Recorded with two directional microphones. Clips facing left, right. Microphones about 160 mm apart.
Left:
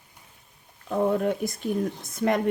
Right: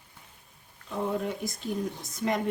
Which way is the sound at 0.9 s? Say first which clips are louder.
Left 7 dB; 55° left (ahead or behind).